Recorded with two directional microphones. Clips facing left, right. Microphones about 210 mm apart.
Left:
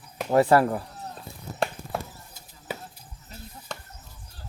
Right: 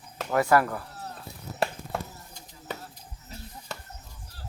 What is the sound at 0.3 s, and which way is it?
Speech, 30° left (ahead or behind).